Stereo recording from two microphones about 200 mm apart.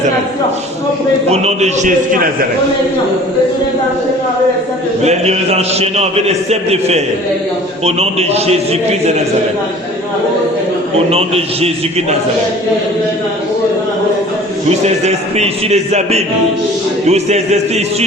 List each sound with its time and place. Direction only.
1.3 s a man's voice: 35° right (ahead or behind)
5.0 s a man's voice: 30° right (ahead or behind)
11.1 s a man's voice: 30° right (ahead or behind)
14.8 s a man's voice: 35° right (ahead or behind)